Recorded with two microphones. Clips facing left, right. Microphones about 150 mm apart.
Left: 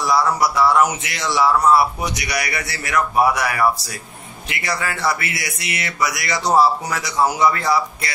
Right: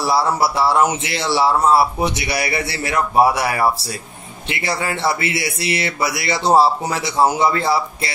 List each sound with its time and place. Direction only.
0.0 s speech: 30° right (ahead or behind)